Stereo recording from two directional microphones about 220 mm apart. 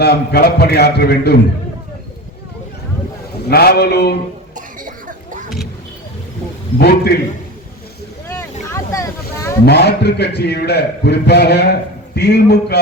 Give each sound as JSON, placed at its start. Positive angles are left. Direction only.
{"t": 0.0, "sound": "a man's voice", "side_deg": 45}
{"t": 3.5, "sound": "a man's voice", "side_deg": 45}
{"t": 4.5, "sound": "a sound", "side_deg": -35}
{"t": 6.7, "sound": "a man's voice", "side_deg": 45}
{"t": 8.7, "sound": "boat", "side_deg": 15}
{"t": 9.6, "sound": "a man's voice", "side_deg": 50}